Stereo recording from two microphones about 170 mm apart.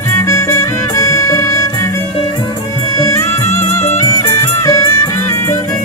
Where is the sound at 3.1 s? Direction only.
15° left (ahead or behind).